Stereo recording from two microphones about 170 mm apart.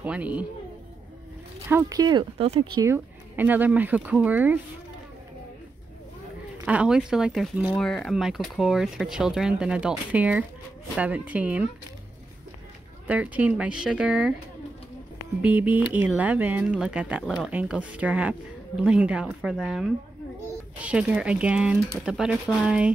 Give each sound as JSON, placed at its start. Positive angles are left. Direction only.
{"t": 0.0, "sound": "speech", "side_deg": -10}
{"t": 1.7, "sound": "speech", "side_deg": -20}
{"t": 2.8, "sound": "speech", "side_deg": -15}
{"t": 6.6, "sound": "speech", "side_deg": -5}
{"t": 7.7, "sound": "speech", "side_deg": 5}
{"t": 13.0, "sound": "speech", "side_deg": -10}
{"t": 15.4, "sound": "speech", "side_deg": -10}